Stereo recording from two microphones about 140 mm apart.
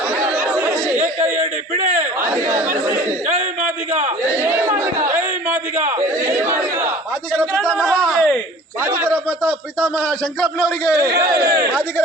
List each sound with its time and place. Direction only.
0.3 s chatter: 15° right (ahead or behind)
1.2 s a man's voice: 60° right (ahead or behind)
2.2 s speech: 20° right (ahead or behind)
4.4 s crowd: 15° right (ahead or behind)
6.0 s chatter: 20° right (ahead or behind)
7.3 s speech: 5° left (ahead or behind)
8.8 s a sound: 15° right (ahead or behind)
9.4 s a man's voice: 5° left (ahead or behind)
11.0 s speech: 25° right (ahead or behind)
11.4 s speech: 90° right